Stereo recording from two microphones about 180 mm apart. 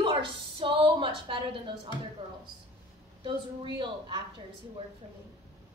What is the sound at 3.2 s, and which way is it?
Speech, 25° right (ahead or behind).